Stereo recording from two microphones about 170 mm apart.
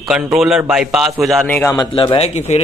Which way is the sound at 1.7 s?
30° left (ahead or behind).